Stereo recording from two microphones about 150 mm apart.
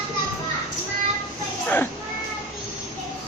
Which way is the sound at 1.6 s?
10° left (ahead or behind).